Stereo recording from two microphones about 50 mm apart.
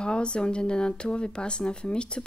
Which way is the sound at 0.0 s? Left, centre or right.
Centre.